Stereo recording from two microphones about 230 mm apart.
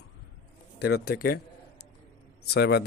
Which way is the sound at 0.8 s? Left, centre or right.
Left.